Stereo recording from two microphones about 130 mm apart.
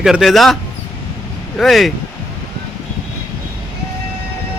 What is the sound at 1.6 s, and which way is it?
Speech, centre (ahead or behind).